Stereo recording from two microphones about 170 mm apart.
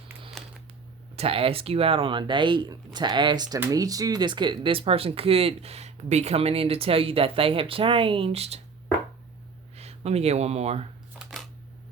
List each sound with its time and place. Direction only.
0.4 s a sound: 5° left (ahead or behind)
1.1 s speech: 35° right (ahead or behind)
9.7 s speech: 40° right (ahead or behind)